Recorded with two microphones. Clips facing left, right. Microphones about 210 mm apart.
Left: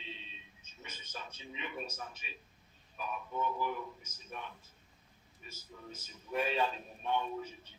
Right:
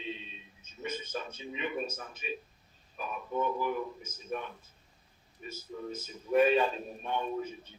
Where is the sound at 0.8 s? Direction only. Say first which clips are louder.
Right 11 dB; 50° right (ahead or behind).